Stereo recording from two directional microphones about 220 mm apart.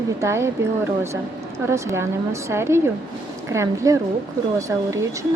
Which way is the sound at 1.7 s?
15° right (ahead or behind).